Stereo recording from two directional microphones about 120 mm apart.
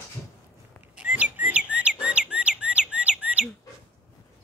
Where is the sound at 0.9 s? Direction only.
10° right (ahead or behind).